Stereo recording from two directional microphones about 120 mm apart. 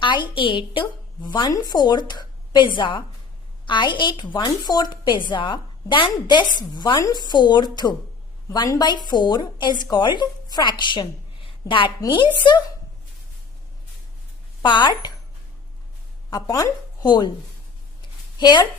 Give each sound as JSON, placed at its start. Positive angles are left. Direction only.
{"t": 0.0, "sound": "a woman's voice", "side_deg": 40}
{"t": 14.6, "sound": "a woman's voice", "side_deg": 40}
{"t": 16.3, "sound": "speech", "side_deg": 30}
{"t": 18.3, "sound": "a woman's voice", "side_deg": 40}